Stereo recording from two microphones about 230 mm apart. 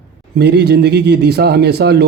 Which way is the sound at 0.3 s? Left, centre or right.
Right.